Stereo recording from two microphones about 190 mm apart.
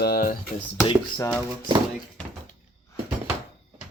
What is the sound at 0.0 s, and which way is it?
Speech, 50° left (ahead or behind).